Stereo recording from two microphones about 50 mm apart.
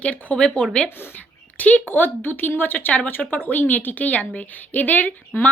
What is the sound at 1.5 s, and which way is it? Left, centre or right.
A woman's voice, left.